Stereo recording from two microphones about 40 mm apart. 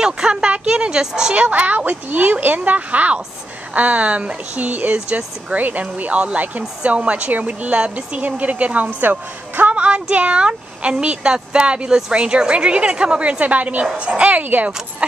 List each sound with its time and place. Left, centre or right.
0.0 s speech: right
1.3 s speech: right
14.4 s speech: right